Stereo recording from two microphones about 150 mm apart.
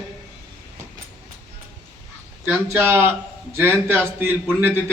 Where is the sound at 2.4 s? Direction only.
10° right (ahead or behind).